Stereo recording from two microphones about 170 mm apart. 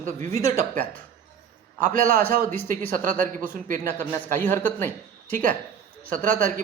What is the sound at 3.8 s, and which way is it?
A man's voice, 15° left (ahead or behind).